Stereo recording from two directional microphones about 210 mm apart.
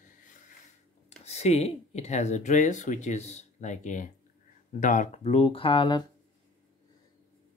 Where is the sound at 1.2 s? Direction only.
30° left (ahead or behind).